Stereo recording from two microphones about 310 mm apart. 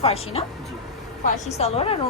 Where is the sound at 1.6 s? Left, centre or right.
Centre.